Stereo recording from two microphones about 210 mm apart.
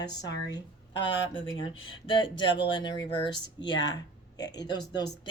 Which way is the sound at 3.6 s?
60° left (ahead or behind).